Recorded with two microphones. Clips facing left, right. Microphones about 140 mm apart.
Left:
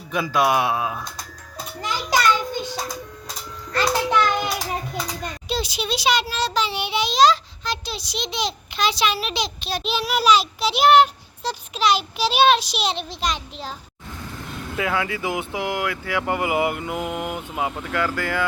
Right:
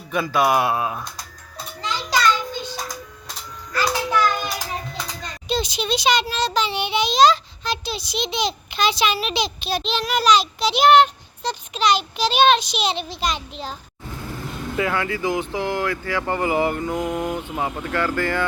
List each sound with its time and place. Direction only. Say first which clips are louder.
0.1 s a child's voice: right 1 dB; centre (ahead or behind)
1.9 s a sound: even; 15° left (ahead or behind)
3.8 s music: left 1 dB; 20° left (ahead or behind)
4.9 s a child's voice: left 3 dB; 5° left (ahead or behind)
14.8 s speech: right 1 dB; 5° left (ahead or behind)